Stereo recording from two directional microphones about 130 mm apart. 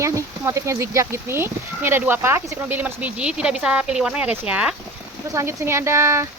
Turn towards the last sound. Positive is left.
turn(degrees=-20)  # may be behind; listen again after turning